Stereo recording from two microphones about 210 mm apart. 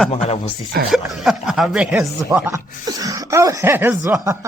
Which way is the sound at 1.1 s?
Centre (ahead or behind).